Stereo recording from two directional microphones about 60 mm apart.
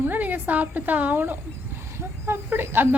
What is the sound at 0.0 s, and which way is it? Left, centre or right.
A woman's voice, right.